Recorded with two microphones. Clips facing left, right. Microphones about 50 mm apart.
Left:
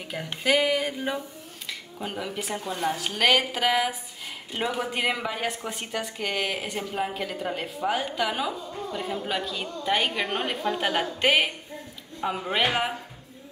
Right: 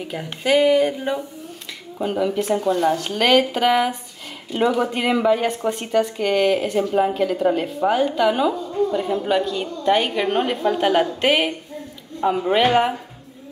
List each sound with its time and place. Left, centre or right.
0.0 s a woman's voice: centre